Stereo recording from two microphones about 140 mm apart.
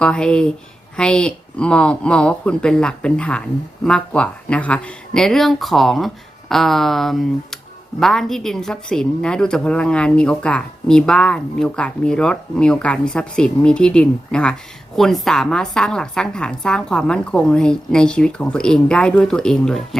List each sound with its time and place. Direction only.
0.0 s speech: 5° left (ahead or behind)